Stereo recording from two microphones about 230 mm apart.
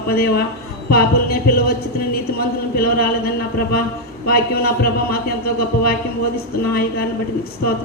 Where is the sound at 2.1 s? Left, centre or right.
Left.